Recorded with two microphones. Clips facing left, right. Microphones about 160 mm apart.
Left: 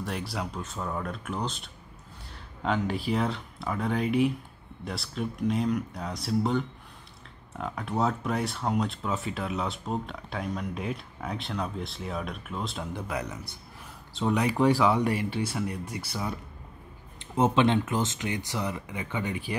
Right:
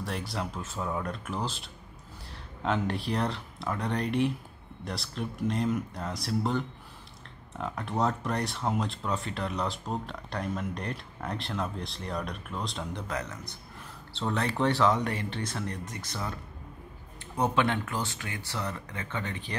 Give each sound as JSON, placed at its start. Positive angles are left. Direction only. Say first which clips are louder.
{"t": 0.0, "sound": "speech", "louder": "left 1 dB", "side_deg": 0}
{"t": 17.2, "sound": "speech", "louder": "left 4 dB", "side_deg": 20}